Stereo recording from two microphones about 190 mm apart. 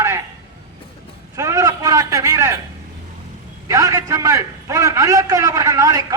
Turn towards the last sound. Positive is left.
turn(degrees=-20)  # may be behind; listen again after turning